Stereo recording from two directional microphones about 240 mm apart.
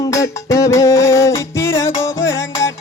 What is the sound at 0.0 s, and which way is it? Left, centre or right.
Music, centre.